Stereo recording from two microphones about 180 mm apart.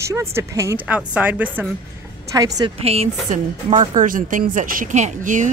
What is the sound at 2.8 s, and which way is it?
A woman's voice, 35° right (ahead or behind).